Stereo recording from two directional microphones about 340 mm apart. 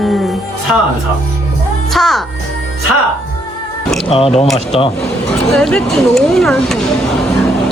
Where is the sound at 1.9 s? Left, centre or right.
Centre.